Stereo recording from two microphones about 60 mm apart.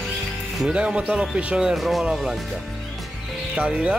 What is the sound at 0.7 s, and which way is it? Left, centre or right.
Speech, centre.